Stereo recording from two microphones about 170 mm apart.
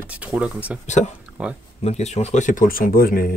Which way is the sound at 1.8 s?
40° left (ahead or behind).